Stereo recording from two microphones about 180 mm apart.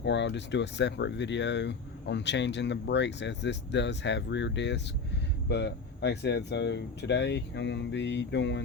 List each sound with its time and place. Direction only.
0.0 s speech: 75° left (ahead or behind)